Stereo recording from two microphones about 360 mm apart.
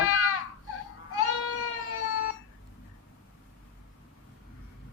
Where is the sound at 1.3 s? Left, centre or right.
Left.